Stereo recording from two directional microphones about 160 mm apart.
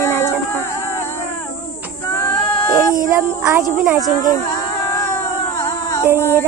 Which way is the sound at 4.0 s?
25° left (ahead or behind).